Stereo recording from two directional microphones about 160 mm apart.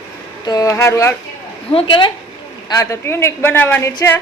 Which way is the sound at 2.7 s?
20° left (ahead or behind).